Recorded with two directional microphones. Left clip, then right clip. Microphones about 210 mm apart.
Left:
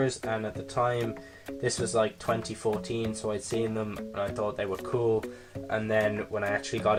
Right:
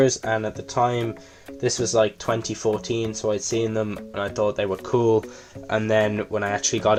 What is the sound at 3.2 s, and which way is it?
Speech, 45° right (ahead or behind).